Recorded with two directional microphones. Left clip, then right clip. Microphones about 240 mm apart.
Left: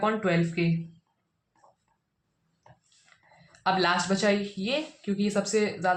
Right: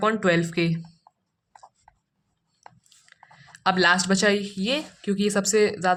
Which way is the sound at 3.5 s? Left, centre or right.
Right.